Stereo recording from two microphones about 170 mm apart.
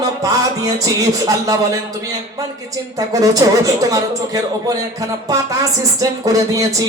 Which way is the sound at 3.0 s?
20° right (ahead or behind).